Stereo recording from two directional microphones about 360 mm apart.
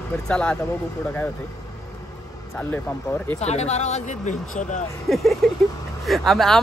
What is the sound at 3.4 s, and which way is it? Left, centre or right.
Speech, centre.